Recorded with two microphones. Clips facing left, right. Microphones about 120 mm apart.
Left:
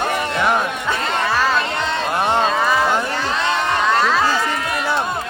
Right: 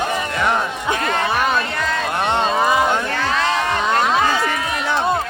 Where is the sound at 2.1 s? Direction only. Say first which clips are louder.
Left 2 dB; 5° left (ahead or behind).